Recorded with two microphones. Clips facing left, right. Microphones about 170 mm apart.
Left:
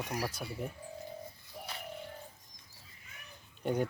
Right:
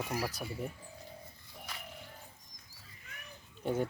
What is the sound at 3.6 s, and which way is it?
Speech, centre (ahead or behind).